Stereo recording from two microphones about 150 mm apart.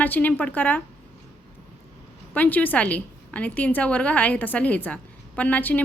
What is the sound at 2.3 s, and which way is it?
A woman's voice, 10° left (ahead or behind).